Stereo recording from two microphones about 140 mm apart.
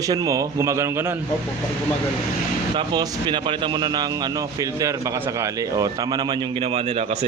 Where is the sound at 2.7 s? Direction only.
30° right (ahead or behind).